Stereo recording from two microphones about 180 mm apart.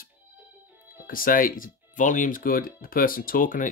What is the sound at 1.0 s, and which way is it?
Speech, 50° left (ahead or behind).